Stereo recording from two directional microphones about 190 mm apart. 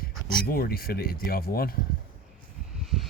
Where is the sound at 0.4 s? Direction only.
50° left (ahead or behind).